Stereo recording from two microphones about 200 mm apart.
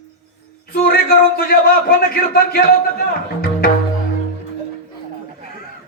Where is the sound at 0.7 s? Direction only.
50° left (ahead or behind).